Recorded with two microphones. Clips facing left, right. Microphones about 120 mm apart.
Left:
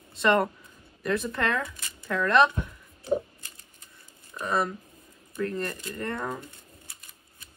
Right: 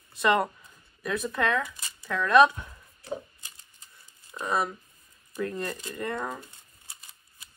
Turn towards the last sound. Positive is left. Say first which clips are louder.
# even
turn(degrees=-25)  # may be behind; listen again after turning